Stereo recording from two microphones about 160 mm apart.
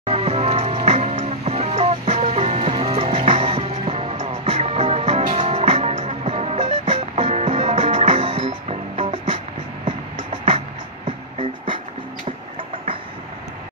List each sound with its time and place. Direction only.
0.0 s music: 40° right (ahead or behind)